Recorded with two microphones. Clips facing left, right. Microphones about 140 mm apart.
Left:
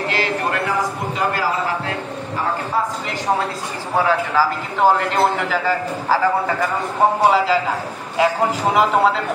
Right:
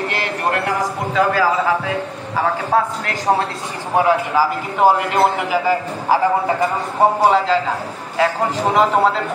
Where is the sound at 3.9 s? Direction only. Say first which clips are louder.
Right 2 dB; 15° right (ahead or behind).